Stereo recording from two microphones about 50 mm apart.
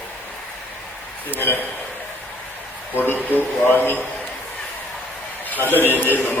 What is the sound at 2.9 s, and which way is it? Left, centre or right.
A man's voice, left.